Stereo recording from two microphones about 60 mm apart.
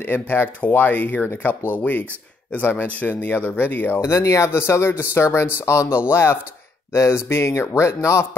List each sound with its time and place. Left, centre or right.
0.0 s speech: left
4.0 s speech: left
6.0 s speech: left
6.9 s speech: left